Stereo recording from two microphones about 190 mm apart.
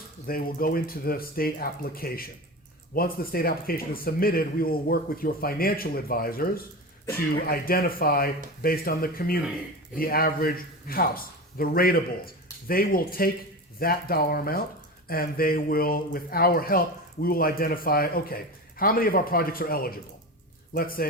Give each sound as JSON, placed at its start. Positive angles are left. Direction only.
{"t": 0.3, "sound": "speech", "side_deg": 50}